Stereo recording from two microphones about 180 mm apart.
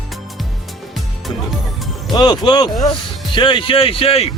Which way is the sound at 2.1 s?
25° left (ahead or behind).